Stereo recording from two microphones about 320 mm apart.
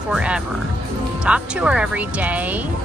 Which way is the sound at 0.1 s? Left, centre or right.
Centre.